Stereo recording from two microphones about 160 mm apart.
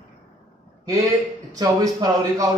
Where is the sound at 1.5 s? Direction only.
25° right (ahead or behind).